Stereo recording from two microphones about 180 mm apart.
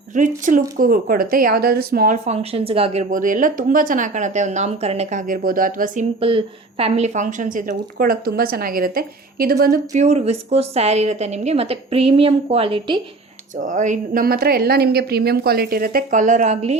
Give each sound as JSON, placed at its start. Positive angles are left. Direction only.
{"t": 0.1, "sound": "speech", "side_deg": -45}
{"t": 2.2, "sound": "speech", "side_deg": -35}
{"t": 6.1, "sound": "speech", "side_deg": -30}
{"t": 9.9, "sound": "a woman's voice", "side_deg": -40}
{"t": 13.6, "sound": "speech", "side_deg": -45}